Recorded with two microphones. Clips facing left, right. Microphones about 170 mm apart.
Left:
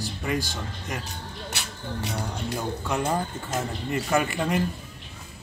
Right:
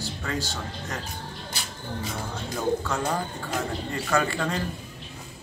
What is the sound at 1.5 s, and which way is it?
Speech, 70° left (ahead or behind).